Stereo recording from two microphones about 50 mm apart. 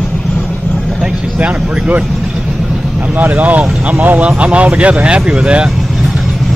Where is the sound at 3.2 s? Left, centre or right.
Right; by 5.7 s centre.